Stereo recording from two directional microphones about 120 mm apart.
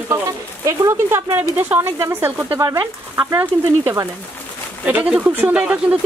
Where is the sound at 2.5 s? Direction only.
30° right (ahead or behind).